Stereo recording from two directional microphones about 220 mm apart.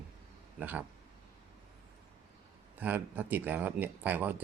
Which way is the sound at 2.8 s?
10° right (ahead or behind).